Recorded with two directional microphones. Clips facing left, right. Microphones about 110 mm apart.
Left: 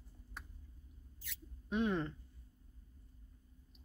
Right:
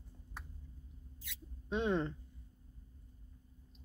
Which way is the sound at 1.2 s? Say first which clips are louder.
Right 2 dB; 25° right (ahead or behind).